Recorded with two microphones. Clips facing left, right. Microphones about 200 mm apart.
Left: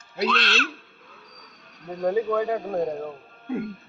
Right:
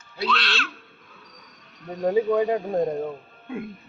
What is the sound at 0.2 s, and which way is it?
Speech, 45° left (ahead or behind).